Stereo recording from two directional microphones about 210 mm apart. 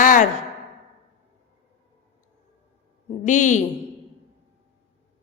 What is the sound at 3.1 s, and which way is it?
Speech, 35° left (ahead or behind).